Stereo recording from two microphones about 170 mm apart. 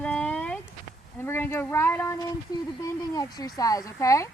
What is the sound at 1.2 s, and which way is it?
Speech, 15° left (ahead or behind).